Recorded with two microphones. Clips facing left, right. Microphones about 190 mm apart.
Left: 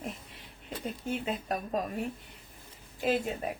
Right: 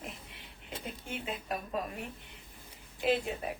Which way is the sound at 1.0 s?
40° left (ahead or behind).